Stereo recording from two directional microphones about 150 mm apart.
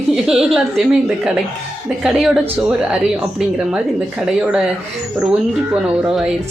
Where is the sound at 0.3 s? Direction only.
5° right (ahead or behind).